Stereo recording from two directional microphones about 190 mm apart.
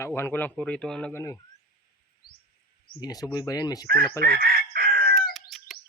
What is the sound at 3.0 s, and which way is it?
Speech, 20° left (ahead or behind).